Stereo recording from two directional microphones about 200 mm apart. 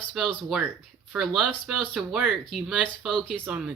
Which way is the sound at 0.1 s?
Centre (ahead or behind).